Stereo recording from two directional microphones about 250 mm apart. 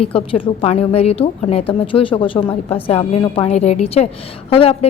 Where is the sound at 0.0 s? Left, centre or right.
Left.